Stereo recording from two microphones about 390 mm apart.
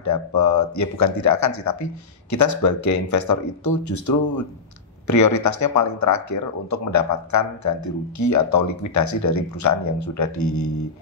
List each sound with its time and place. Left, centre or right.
0.0 s speech: left